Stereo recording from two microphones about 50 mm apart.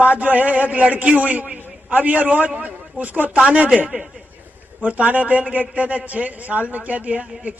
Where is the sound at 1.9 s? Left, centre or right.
Right.